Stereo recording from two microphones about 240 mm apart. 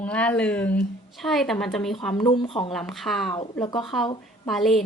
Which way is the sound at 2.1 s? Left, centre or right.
Centre.